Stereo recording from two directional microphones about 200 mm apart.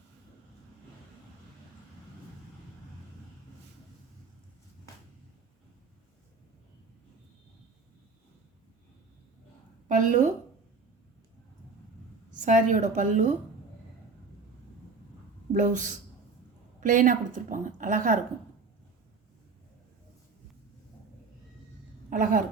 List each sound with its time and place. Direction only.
9.9 s a woman's voice: 40° right (ahead or behind)
12.5 s a woman's voice: 40° right (ahead or behind)
15.5 s a woman's voice: 40° right (ahead or behind)
22.1 s speech: 45° right (ahead or behind)